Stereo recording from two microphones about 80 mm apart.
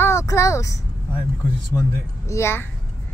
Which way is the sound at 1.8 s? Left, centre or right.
Left.